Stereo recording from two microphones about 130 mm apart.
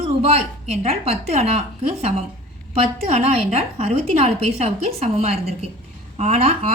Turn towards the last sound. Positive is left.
turn(degrees=-55)  # may be behind; listen again after turning